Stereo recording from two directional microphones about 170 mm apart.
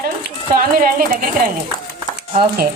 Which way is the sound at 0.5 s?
60° right (ahead or behind).